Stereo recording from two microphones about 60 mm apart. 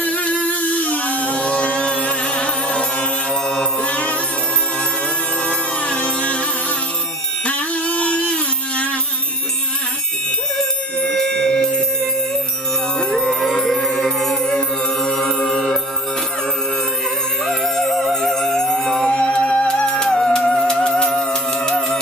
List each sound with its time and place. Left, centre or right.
0.0 s music: left
5.5 s music: left
7.4 s music: left
11.0 s music: centre
13.1 s music: centre
17.5 s music: centre